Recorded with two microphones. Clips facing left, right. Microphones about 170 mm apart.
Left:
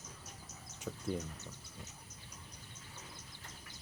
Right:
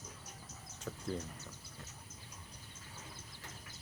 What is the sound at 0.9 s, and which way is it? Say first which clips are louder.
Speech: left 1 dB; 5° left (ahead or behind).